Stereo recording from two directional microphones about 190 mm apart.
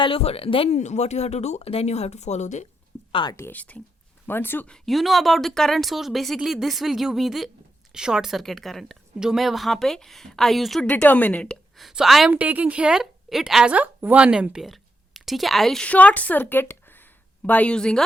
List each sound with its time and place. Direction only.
0.0 s speech: 30° left (ahead or behind)
3.1 s speech: 25° left (ahead or behind)
3.3 s a woman's voice: 10° left (ahead or behind)